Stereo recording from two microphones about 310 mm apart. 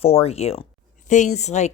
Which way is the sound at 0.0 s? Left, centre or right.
Centre.